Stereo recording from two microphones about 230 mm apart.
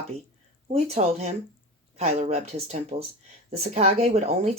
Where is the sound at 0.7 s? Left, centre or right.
Right.